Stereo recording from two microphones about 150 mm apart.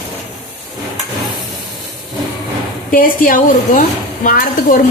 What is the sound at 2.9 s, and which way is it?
A woman's voice, 65° left (ahead or behind).